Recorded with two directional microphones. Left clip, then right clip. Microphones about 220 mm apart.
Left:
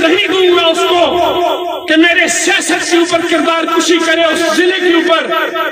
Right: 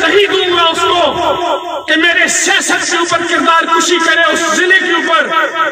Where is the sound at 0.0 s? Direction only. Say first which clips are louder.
Even; 45° left (ahead or behind).